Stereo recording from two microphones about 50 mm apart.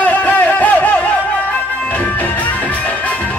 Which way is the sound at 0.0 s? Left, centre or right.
Left.